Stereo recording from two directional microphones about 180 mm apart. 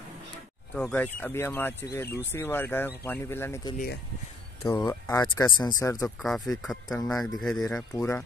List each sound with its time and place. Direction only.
0.7 s speech: 10° left (ahead or behind)
3.7 s speech: 60° left (ahead or behind)
4.7 s speech: 15° left (ahead or behind)
6.0 s speech: centre (ahead or behind)
7.9 s speech: 15° left (ahead or behind)